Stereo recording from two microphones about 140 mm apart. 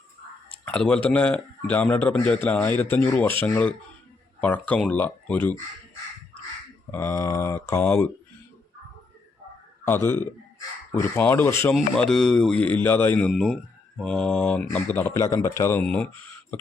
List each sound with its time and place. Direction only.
0.6 s a sound: 10° left (ahead or behind)
1.0 s a man's voice: 10° left (ahead or behind)
6.9 s speech: 15° left (ahead or behind)
9.8 s a man's voice: 15° left (ahead or behind)
11.7 s speech: centre (ahead or behind)
13.3 s a man's voice: centre (ahead or behind); by 15.8 s 20° left (ahead or behind)
15.8 s a man's voice: 10° left (ahead or behind)